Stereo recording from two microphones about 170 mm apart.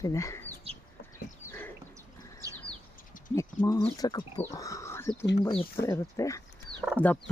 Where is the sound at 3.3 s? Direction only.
15° left (ahead or behind).